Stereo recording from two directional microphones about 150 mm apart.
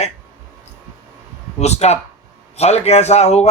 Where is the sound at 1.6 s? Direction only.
45° left (ahead or behind).